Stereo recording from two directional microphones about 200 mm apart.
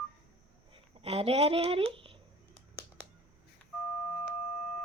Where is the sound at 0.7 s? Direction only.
30° right (ahead or behind).